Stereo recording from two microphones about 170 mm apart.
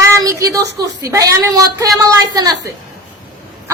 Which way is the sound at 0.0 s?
20° right (ahead or behind).